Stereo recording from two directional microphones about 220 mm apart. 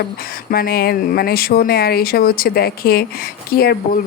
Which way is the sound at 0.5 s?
45° left (ahead or behind).